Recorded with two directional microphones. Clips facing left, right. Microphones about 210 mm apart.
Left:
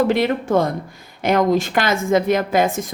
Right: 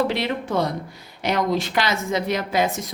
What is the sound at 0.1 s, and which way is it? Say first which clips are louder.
A woman's voice: left 7 dB; 50° left (ahead or behind).